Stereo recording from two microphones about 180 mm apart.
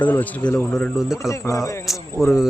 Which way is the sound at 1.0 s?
Centre (ahead or behind).